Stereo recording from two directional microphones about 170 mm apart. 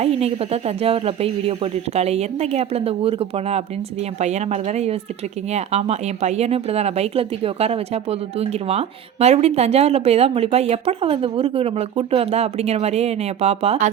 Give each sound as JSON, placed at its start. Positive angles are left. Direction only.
{"t": 0.0, "sound": "speech", "side_deg": -35}